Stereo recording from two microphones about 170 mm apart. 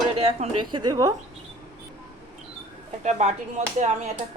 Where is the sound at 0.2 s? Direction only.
35° right (ahead or behind).